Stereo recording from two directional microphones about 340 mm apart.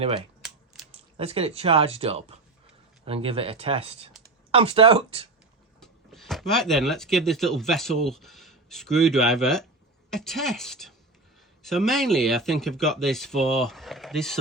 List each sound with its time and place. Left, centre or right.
0.4 s a sound: centre
1.1 s speech: centre
5.8 s speech: centre